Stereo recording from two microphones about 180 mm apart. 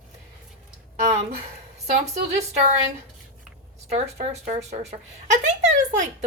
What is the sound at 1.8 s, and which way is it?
Speech, 40° right (ahead or behind).